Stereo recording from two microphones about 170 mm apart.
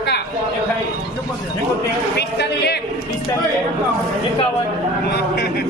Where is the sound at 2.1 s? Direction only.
75° left (ahead or behind).